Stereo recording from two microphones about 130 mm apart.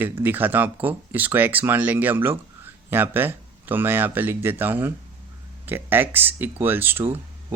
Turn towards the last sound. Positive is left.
turn(degrees=-15)  # may be behind; listen again after turning